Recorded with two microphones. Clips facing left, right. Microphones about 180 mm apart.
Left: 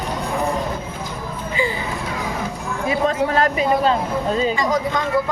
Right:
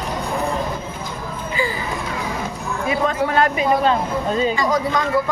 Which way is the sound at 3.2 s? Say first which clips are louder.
Even; 35° left (ahead or behind).